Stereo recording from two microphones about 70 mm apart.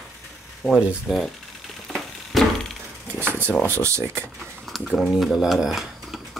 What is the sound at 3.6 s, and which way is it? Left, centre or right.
Speech, right.